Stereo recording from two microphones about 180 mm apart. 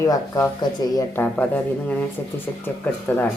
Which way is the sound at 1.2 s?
10° left (ahead or behind).